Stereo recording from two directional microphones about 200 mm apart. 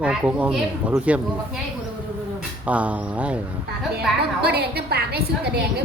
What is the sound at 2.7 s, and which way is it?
Speech, 5° right (ahead or behind).